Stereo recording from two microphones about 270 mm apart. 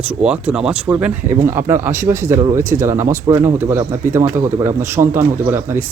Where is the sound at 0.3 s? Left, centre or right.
Centre.